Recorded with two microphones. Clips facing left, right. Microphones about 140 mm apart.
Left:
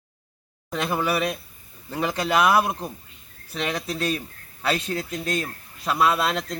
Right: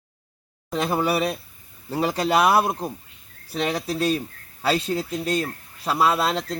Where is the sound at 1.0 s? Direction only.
35° right (ahead or behind).